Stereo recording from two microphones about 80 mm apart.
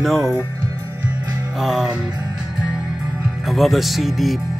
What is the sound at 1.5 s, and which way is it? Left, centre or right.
Music, centre.